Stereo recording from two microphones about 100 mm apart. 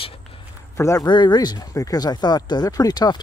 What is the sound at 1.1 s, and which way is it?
Speech, 50° left (ahead or behind).